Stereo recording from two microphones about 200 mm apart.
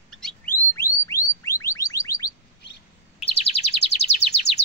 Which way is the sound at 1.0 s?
15° left (ahead or behind).